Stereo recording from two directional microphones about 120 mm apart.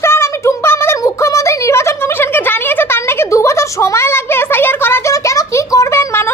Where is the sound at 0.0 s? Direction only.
20° left (ahead or behind).